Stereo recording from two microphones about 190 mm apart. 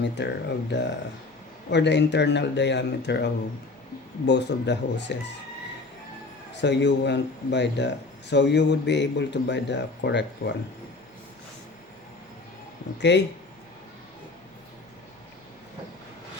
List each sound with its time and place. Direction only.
0.0 s speech: 65° left (ahead or behind)
4.3 s speech: 65° left (ahead or behind)
6.5 s speech: 65° left (ahead or behind)
13.0 s speech: 65° left (ahead or behind)